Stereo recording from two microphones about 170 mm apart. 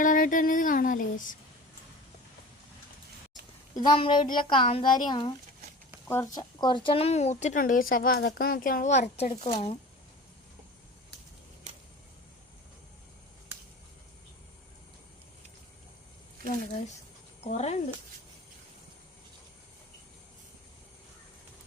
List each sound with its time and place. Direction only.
0.0 s speech: 50° left (ahead or behind)
3.8 s a woman's voice: 30° left (ahead or behind)
6.1 s speech: 15° left (ahead or behind)
6.6 s speech: 25° left (ahead or behind)
17.4 s speech: 40° left (ahead or behind)